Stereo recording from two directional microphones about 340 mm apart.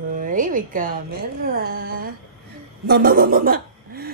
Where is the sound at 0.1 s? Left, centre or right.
Right.